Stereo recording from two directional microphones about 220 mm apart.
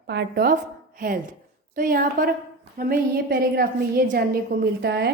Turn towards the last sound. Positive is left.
turn(degrees=-45)  # may be behind; listen again after turning